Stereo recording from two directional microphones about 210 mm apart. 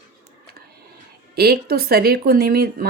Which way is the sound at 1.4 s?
50° right (ahead or behind).